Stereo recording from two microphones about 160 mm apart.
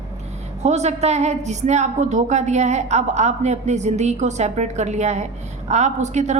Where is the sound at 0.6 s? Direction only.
45° right (ahead or behind).